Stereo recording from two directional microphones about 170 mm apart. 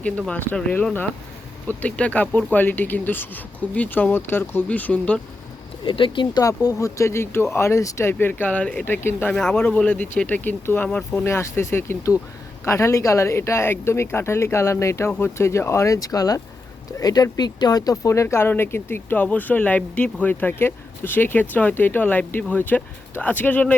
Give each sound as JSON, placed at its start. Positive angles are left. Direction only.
{"t": 0.0, "sound": "speech", "side_deg": 5}
{"t": 5.8, "sound": "speech", "side_deg": 30}